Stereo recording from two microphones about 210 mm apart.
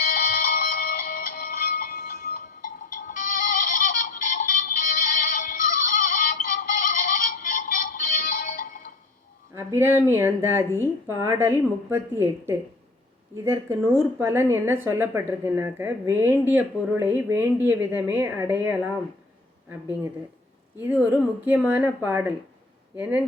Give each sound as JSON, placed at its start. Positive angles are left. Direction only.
{"t": 0.0, "sound": "music", "side_deg": 45}
{"t": 9.6, "sound": "a woman's voice", "side_deg": -10}
{"t": 20.7, "sound": "a woman's voice", "side_deg": -10}